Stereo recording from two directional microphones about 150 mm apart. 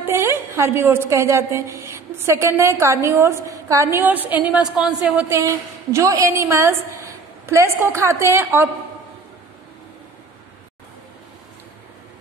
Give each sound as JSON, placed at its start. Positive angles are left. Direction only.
{"t": 0.0, "sound": "a woman's voice", "side_deg": -15}